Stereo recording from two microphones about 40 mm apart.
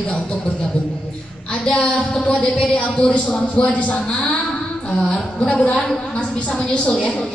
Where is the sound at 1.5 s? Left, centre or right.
Left.